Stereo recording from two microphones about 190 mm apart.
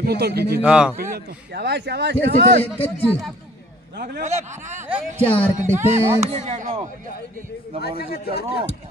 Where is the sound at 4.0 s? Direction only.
45° right (ahead or behind).